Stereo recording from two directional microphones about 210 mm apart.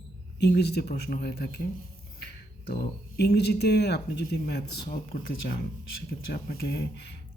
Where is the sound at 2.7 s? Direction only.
50° left (ahead or behind).